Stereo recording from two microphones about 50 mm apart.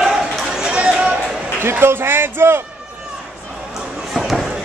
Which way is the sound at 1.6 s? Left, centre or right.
Right.